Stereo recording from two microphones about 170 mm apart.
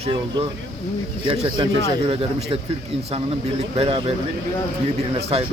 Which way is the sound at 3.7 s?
35° right (ahead or behind).